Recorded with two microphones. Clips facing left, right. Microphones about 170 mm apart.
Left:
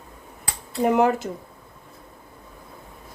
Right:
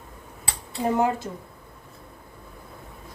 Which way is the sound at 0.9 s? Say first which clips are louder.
Left 4 dB; 80° left.